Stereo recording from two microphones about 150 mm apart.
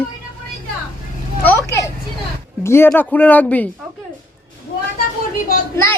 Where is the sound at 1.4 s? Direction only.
15° left (ahead or behind).